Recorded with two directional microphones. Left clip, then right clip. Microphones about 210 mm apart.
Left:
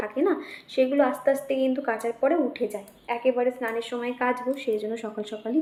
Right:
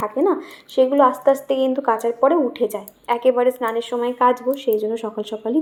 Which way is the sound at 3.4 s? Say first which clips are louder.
Right 7 dB; 20° right (ahead or behind).